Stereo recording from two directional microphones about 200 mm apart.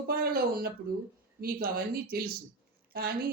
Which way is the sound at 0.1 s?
50° right (ahead or behind).